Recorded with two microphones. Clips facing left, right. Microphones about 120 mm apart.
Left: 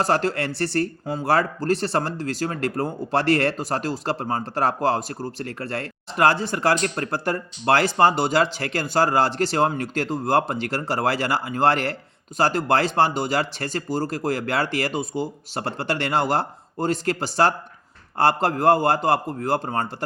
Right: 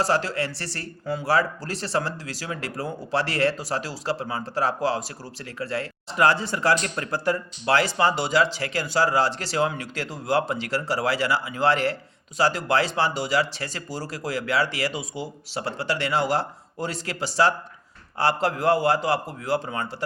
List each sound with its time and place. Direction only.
0.0 s speech: 50° left (ahead or behind)